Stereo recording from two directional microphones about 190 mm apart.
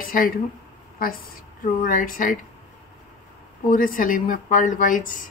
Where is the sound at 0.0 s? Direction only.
45° left (ahead or behind).